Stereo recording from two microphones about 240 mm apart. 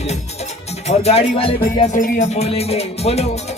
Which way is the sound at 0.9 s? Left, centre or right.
Left.